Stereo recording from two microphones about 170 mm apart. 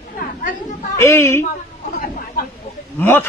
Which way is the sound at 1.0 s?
15° left (ahead or behind).